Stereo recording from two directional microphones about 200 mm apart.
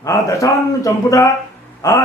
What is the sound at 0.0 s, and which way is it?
A man's voice, 15° left (ahead or behind).